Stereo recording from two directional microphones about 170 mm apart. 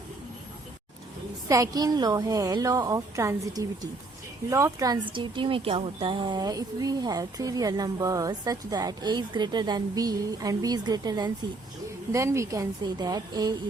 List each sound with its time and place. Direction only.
1.5 s speech: 20° right (ahead or behind)